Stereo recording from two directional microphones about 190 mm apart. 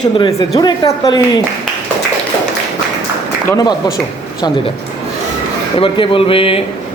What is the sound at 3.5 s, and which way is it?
Speech, 20° left (ahead or behind).